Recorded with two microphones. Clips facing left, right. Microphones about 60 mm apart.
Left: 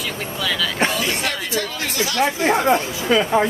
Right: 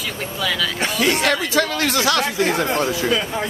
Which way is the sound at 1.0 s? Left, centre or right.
Right.